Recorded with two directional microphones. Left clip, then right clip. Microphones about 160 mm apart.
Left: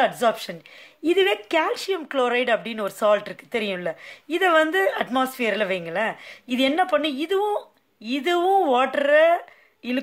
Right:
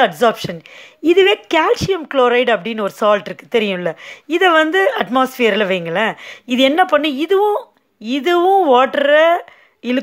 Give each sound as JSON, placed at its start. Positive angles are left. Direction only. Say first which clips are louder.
{"t": 0.0, "sound": "speech", "louder": "right 7 dB", "side_deg": -35}